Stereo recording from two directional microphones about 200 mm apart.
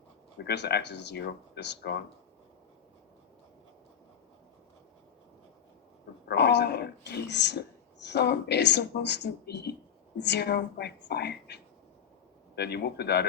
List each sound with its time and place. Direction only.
0.3 s speech: 60° left (ahead or behind)
6.2 s speech: 55° left (ahead or behind)